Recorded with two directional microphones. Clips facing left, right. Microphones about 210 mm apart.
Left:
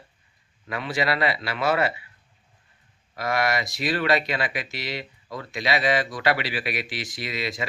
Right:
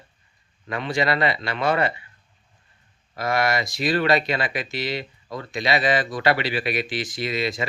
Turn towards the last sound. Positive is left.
turn(degrees=0)  # may be behind; listen again after turning